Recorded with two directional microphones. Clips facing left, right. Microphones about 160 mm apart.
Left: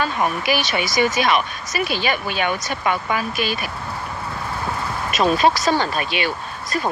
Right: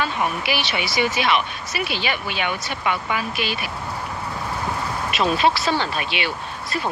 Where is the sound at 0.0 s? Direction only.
45° left (ahead or behind).